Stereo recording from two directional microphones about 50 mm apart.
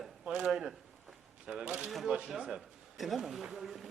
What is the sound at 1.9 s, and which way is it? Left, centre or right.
Speech, centre.